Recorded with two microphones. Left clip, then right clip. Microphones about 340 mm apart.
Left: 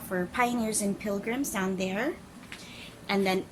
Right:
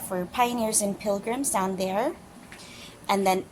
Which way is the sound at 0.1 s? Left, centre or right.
Centre.